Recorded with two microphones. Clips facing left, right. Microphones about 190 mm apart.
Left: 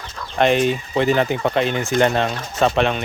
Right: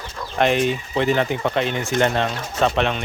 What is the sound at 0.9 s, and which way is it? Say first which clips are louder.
Speech: left 2 dB; 40° left (ahead or behind).